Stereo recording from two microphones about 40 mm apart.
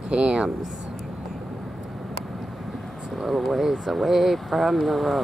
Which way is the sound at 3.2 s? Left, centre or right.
Centre.